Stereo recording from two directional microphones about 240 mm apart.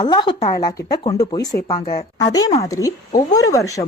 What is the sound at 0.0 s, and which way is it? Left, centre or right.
Speech, centre.